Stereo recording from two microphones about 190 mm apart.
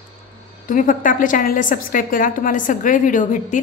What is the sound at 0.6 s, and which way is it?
Speech, 45° left (ahead or behind).